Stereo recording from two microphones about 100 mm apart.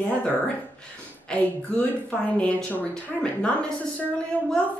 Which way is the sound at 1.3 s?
10° left (ahead or behind).